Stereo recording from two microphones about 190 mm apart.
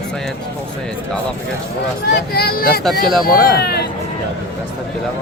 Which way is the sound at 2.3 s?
55° left (ahead or behind).